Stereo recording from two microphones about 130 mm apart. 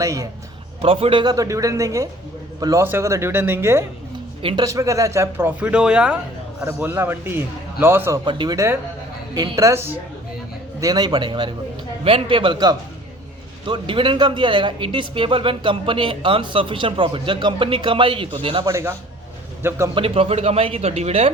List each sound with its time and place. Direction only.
0.0 s speech: 25° right (ahead or behind)
0.8 s speech: 45° right (ahead or behind); by 8.2 s 20° right (ahead or behind)
8.2 s speech: 35° right (ahead or behind); by 10.0 s 20° right (ahead or behind)
10.8 s speech: 30° right (ahead or behind)
18.6 s speech: 20° right (ahead or behind)
19.9 s speech: 45° right (ahead or behind)